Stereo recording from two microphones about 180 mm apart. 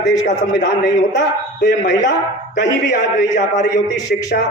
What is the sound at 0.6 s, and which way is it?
A man's voice, 80° left.